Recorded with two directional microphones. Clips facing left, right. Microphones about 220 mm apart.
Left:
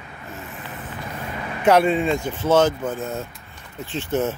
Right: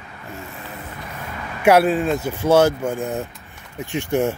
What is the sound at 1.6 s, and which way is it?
A man's voice, 10° right (ahead or behind).